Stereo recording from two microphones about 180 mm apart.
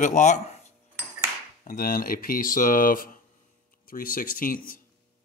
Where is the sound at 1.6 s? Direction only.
50° left (ahead or behind).